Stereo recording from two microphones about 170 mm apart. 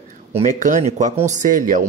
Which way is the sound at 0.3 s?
40° right (ahead or behind).